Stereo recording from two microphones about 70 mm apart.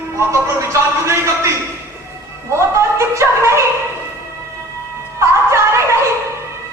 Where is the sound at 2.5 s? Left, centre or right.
Right.